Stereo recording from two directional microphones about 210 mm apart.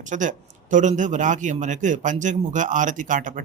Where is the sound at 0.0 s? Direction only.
35° right (ahead or behind).